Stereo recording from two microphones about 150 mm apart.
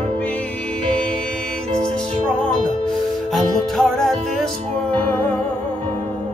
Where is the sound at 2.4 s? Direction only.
5° left (ahead or behind).